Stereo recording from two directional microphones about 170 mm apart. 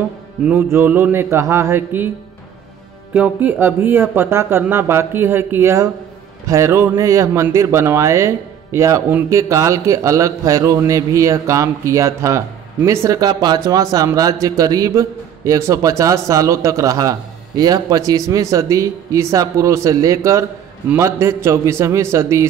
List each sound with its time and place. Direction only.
0.5 s speech: 15° right (ahead or behind)
3.1 s a man's voice: 10° right (ahead or behind)